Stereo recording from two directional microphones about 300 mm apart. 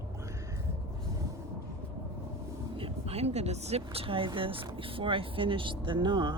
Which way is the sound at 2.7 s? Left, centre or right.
Centre.